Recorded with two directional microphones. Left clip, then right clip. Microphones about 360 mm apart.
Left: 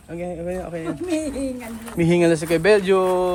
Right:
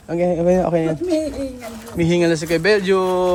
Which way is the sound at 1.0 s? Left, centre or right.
Left.